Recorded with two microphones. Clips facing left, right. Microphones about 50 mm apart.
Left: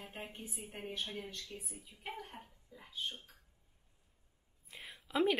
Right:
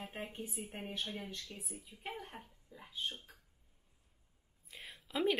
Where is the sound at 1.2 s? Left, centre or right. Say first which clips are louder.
Right 1 dB; centre.